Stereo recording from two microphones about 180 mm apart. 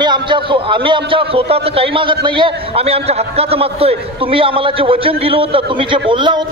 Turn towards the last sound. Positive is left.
turn(degrees=-25)  # may be behind; listen again after turning